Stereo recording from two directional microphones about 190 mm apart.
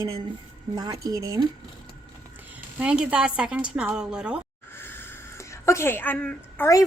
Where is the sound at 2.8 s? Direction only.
5° right (ahead or behind).